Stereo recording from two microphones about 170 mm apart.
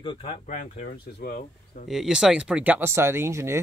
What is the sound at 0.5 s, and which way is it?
Speech, 50° left (ahead or behind).